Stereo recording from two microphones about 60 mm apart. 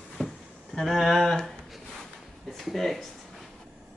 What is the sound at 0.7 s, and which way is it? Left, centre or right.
Speech, centre.